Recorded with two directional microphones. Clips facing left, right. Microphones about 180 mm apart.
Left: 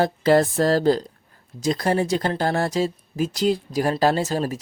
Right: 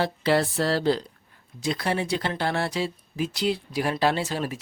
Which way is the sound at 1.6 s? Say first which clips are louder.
Left 5 dB; 40° left (ahead or behind).